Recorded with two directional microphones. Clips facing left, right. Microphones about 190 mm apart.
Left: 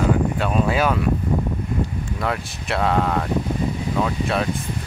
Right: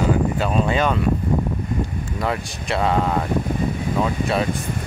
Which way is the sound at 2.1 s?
Centre (ahead or behind).